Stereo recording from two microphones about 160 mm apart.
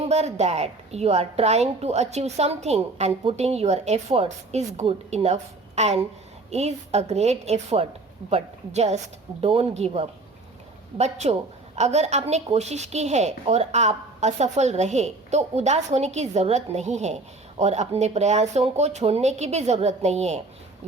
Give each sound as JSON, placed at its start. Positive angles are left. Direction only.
{"t": 0.0, "sound": "a woman's voice", "side_deg": -45}